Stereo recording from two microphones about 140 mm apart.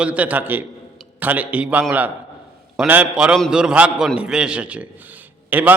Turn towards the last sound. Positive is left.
turn(degrees=-10)  # may be behind; listen again after turning